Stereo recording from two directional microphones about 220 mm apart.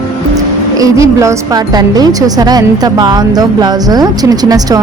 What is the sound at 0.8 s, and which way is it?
A woman's voice, 15° right (ahead or behind).